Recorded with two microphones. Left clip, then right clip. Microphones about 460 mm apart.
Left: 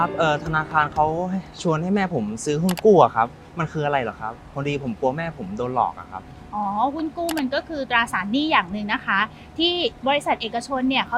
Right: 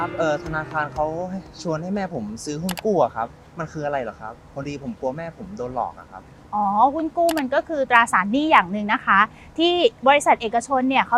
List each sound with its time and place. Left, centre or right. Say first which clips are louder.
0.0 s speech: left 2 dB; left
6.7 s a woman's voice: right 7 dB; right